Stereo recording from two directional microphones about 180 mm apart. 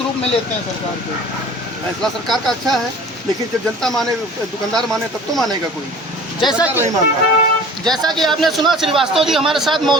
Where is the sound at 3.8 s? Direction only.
5° left (ahead or behind).